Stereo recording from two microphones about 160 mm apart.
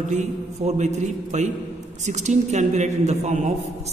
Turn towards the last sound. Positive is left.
turn(degrees=-45)  # may be behind; listen again after turning